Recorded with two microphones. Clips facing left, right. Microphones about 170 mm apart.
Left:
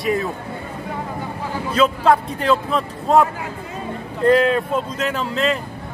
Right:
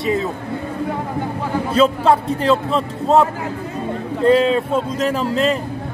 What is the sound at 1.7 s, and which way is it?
Speech, 30° right (ahead or behind).